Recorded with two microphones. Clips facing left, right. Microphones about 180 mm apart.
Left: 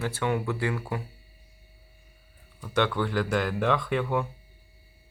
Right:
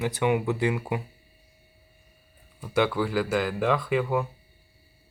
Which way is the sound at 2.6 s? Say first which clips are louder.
Right 2 dB; 10° right (ahead or behind).